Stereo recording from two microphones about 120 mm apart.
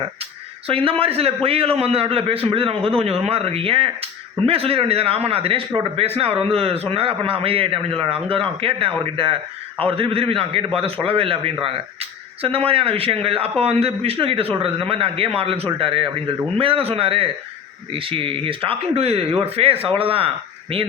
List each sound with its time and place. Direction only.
0.7 s speech: 50° right (ahead or behind)